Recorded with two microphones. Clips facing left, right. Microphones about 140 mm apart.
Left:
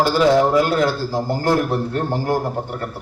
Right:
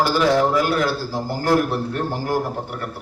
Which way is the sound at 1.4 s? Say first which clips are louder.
Right 2 dB; 25° left (ahead or behind).